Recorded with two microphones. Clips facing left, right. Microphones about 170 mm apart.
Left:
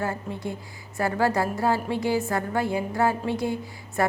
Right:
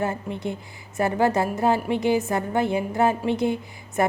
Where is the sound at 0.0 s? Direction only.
20° right (ahead or behind).